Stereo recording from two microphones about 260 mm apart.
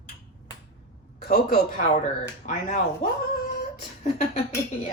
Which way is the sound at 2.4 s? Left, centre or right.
Left.